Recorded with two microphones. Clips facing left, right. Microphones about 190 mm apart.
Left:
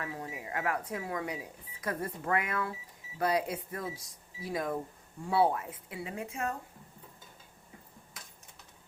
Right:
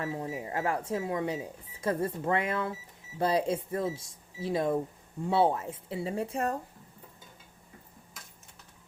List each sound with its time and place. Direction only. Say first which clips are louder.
0.0 s speech: right 6 dB; 30° right (ahead or behind)